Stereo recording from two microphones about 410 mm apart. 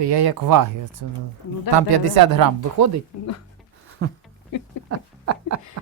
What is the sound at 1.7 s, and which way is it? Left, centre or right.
Speech, right.